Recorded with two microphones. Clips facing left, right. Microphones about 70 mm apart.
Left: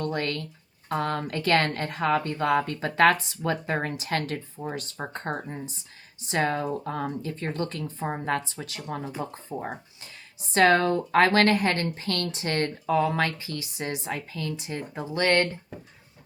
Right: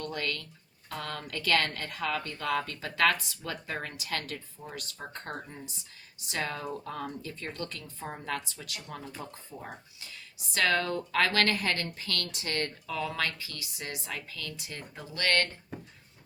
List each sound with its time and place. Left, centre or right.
0.1 s a woman's voice: left
10.4 s a woman's voice: left